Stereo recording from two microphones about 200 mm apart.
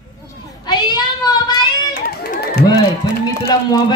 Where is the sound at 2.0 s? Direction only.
45° left (ahead or behind).